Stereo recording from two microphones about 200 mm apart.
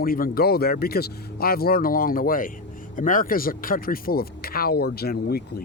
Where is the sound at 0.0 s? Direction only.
45° left (ahead or behind).